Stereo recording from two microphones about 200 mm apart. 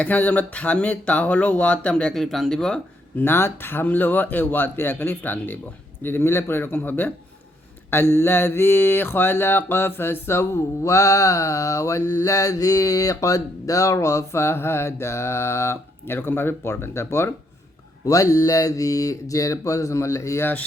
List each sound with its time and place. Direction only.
0.0 s mantra: 10° left (ahead or behind)